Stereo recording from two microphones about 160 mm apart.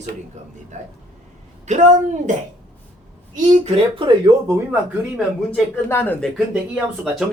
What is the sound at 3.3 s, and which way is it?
Speech, 50° right (ahead or behind).